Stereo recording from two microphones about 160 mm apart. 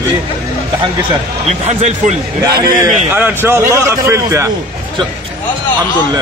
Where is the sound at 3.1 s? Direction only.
10° right (ahead or behind).